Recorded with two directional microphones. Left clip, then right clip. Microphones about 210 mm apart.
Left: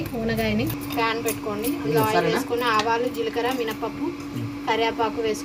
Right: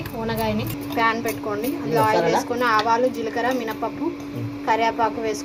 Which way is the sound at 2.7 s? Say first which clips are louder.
Right 3 dB; 15° right (ahead or behind).